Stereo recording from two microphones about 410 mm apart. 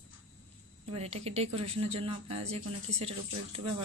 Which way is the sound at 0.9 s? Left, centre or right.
Centre.